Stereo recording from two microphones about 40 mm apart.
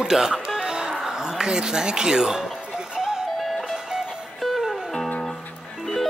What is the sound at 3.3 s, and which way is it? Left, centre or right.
Music, centre.